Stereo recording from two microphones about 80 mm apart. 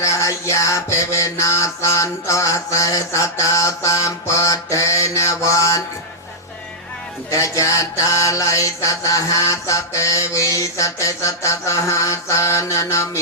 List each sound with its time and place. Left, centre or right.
0.0 s mantra: left
7.3 s music: left
8.1 s mantra: left